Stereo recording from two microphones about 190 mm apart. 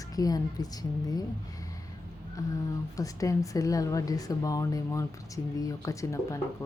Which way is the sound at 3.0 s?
15° left (ahead or behind).